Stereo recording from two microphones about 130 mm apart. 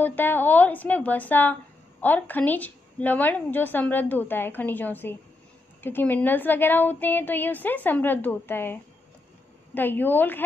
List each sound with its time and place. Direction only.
0.0 s a woman's voice: 15° left (ahead or behind)
9.8 s a woman's voice: 15° left (ahead or behind)